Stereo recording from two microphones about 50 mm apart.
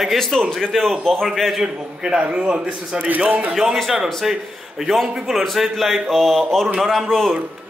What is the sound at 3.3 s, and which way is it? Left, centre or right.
Speech, right.